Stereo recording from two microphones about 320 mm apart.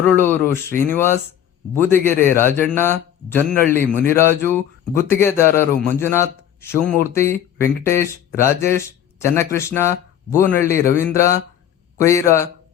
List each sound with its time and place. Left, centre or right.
0.0 s a man's voice: centre